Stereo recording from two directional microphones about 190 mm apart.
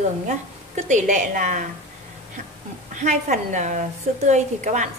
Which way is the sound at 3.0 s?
40° right (ahead or behind).